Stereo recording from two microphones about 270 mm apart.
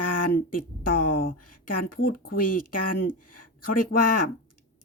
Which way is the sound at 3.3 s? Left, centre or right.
Left.